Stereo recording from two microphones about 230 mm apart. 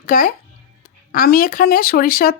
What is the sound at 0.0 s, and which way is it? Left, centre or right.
A woman's voice, left.